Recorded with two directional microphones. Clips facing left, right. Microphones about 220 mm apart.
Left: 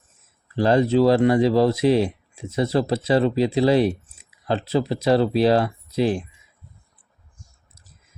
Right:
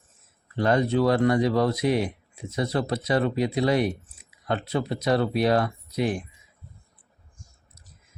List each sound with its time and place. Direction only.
0.5 s speech: 25° left (ahead or behind)